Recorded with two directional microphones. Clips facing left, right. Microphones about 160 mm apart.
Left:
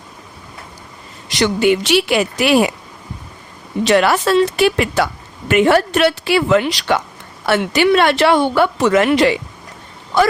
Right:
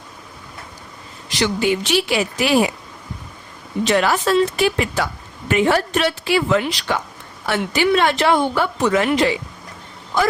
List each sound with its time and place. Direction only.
1.4 s a woman's voice: 65° left (ahead or behind)
3.8 s speech: 75° left (ahead or behind)